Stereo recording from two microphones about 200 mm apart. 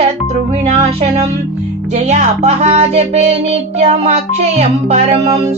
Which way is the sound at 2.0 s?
35° right (ahead or behind).